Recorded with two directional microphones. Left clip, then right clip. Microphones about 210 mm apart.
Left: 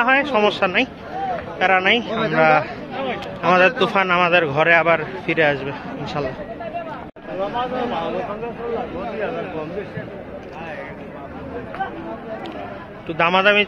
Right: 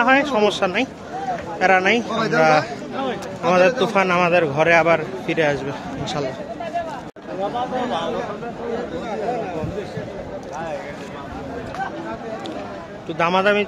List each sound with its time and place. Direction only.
0.0 s a man's voice: 15° right (ahead or behind)
13.2 s a man's voice: 10° right (ahead or behind)